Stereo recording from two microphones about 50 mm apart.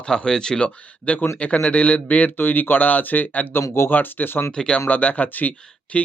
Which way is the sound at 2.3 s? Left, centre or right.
Left.